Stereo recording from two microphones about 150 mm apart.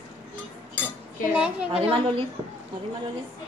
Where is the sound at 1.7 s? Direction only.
40° right (ahead or behind).